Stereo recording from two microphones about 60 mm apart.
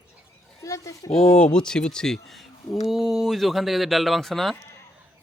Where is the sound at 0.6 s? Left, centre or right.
Left.